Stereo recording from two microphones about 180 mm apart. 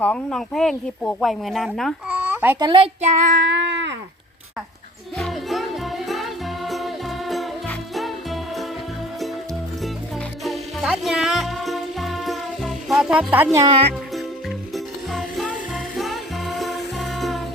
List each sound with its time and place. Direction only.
0.0 s speech: 5° left (ahead or behind)
2.0 s a sound: 10° right (ahead or behind)
2.6 s child singing: 25° right (ahead or behind)
3.4 s a sound: 75° right (ahead or behind)
5.1 s music: centre (ahead or behind)
10.4 s music: centre (ahead or behind)
14.7 s music: centre (ahead or behind)